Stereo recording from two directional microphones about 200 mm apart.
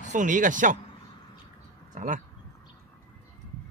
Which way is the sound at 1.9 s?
40° right (ahead or behind).